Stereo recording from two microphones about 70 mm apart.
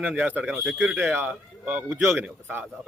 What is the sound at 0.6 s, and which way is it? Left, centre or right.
Speech, centre.